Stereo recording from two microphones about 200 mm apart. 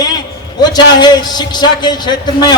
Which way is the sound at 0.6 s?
20° left (ahead or behind).